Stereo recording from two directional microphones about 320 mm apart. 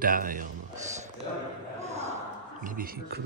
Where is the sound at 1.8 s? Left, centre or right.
Right.